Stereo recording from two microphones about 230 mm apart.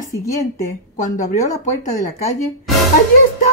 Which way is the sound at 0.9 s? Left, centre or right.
Left.